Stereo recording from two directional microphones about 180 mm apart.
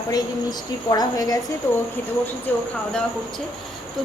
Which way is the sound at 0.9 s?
20° left (ahead or behind).